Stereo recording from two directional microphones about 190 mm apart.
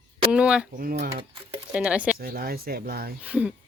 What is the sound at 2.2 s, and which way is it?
Speech, 50° right (ahead or behind).